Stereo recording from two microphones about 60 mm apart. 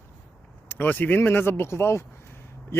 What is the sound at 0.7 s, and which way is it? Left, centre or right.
Speech, left.